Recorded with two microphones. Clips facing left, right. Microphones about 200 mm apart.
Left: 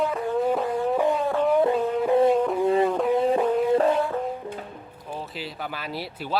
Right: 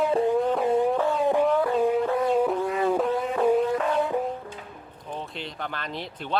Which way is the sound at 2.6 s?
25° left (ahead or behind).